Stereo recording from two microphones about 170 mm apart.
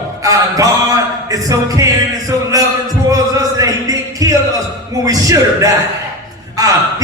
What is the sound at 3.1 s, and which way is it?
Music, 20° right (ahead or behind).